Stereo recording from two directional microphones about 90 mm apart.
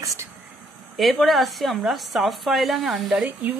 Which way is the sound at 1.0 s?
Centre (ahead or behind).